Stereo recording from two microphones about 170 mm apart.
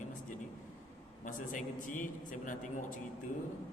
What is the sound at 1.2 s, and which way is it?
A man's voice, 50° left (ahead or behind).